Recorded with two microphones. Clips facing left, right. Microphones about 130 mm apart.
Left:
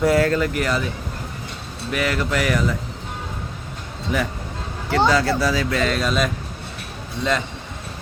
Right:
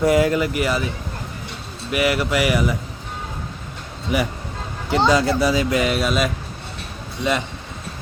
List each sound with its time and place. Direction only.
0.0 s speech: 15° right (ahead or behind)
1.9 s speech: 10° right (ahead or behind)
4.9 s speech: 15° right (ahead or behind)